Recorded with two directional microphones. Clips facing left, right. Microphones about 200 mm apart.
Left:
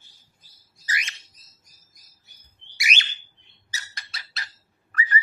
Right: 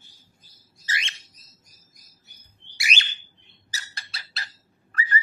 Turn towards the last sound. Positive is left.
turn(degrees=-30)  # may be behind; listen again after turning